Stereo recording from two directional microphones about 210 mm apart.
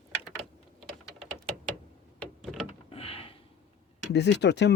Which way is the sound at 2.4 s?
Centre (ahead or behind).